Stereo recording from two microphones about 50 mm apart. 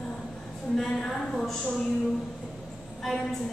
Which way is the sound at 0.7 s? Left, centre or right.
Centre.